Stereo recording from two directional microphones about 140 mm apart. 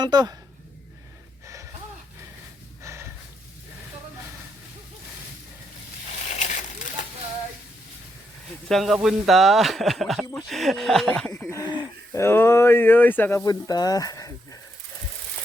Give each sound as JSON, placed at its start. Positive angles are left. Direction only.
{"t": 0.0, "sound": "speech", "side_deg": -30}
{"t": 2.8, "sound": "a sound", "side_deg": -20}
{"t": 6.2, "sound": "a sound", "side_deg": 60}
{"t": 8.7, "sound": "speech", "side_deg": 0}
{"t": 11.1, "sound": "speech", "side_deg": 10}
{"t": 11.6, "sound": "speech", "side_deg": 30}
{"t": 13.4, "sound": "speech", "side_deg": 25}